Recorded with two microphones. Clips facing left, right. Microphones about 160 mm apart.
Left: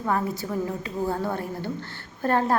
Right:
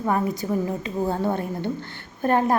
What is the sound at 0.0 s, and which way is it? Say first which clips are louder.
A woman's voice: right 3 dB; 15° right (ahead or behind).